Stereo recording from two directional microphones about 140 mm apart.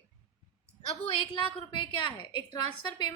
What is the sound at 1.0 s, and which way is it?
A woman's voice, 40° left (ahead or behind).